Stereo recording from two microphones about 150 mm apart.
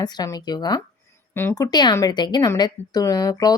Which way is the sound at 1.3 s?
15° left (ahead or behind).